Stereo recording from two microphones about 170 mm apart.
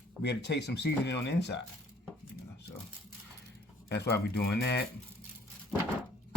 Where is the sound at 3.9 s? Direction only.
75° left (ahead or behind).